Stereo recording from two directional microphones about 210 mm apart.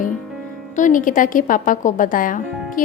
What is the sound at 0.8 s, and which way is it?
Speech, 40° left (ahead or behind).